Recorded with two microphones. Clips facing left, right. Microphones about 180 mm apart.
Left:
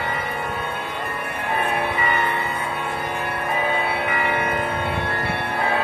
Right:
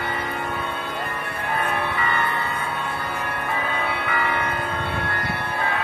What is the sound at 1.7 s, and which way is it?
Music, 15° left (ahead or behind).